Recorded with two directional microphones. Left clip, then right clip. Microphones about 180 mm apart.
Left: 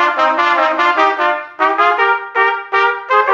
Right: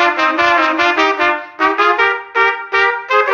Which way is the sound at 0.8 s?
25° right (ahead or behind).